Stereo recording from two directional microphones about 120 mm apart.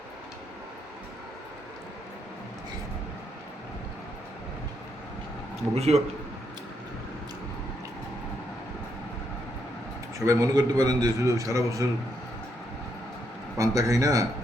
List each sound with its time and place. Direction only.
5.7 s a man's voice: 60° right (ahead or behind)
10.2 s a man's voice: 30° right (ahead or behind)
13.6 s a man's voice: 30° right (ahead or behind)